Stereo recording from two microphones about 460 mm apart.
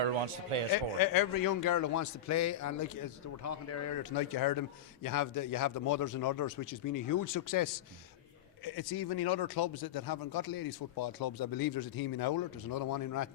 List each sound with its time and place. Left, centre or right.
0.7 s a man's voice: left
4.1 s a man's voice: left